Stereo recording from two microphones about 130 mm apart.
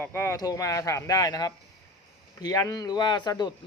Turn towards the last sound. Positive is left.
turn(degrees=35)  # may be behind; listen again after turning